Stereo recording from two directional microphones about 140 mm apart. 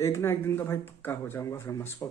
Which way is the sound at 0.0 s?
20° left (ahead or behind).